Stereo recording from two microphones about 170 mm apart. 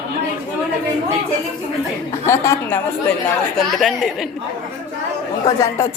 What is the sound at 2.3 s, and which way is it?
Speech, 15° left (ahead or behind).